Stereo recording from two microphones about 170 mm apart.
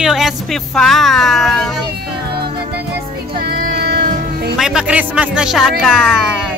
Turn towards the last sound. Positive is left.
turn(degrees=0)  # may be behind; listen again after turning